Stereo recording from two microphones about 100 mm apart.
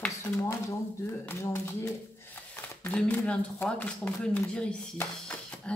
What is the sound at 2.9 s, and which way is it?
Speech, 10° left (ahead or behind).